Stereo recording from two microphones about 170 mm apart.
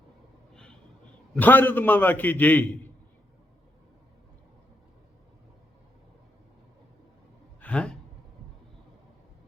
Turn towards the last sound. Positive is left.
turn(degrees=5)  # may be behind; listen again after turning